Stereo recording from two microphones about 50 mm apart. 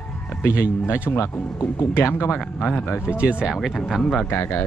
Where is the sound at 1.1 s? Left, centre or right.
Left.